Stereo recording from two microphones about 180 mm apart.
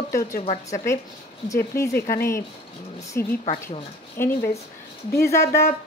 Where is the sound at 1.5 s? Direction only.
15° left (ahead or behind).